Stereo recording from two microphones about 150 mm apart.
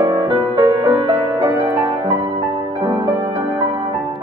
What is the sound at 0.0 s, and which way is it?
Music, 25° right (ahead or behind).